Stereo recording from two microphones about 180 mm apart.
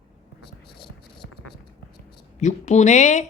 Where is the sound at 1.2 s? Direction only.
90° left.